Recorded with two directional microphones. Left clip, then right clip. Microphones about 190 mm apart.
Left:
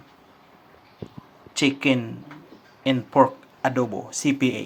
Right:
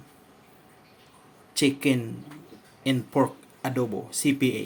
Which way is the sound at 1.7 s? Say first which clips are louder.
Left 3 dB; 10° right (ahead or behind).